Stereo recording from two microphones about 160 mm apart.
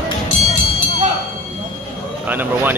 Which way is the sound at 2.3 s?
10° right (ahead or behind).